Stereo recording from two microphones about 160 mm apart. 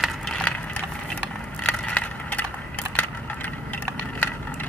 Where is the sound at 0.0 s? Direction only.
5° left (ahead or behind).